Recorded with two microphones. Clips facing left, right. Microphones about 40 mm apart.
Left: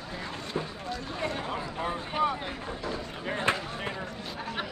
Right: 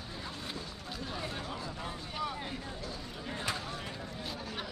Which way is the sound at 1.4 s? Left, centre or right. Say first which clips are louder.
Left 7 dB; left.